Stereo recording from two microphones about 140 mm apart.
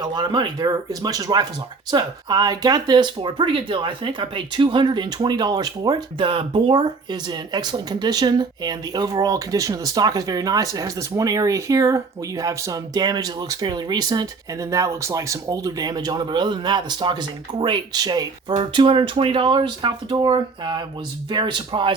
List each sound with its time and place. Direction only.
0.0 s speech: 30° right (ahead or behind)